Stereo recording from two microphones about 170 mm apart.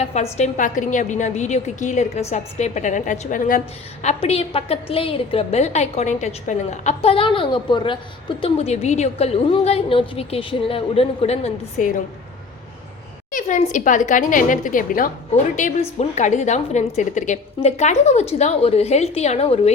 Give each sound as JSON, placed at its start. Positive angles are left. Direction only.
{"t": 0.0, "sound": "a woman's voice", "side_deg": 40}
{"t": 4.0, "sound": "a woman's voice", "side_deg": 40}
{"t": 13.3, "sound": "a woman's voice", "side_deg": 45}
{"t": 15.5, "sound": "a woman's voice", "side_deg": 45}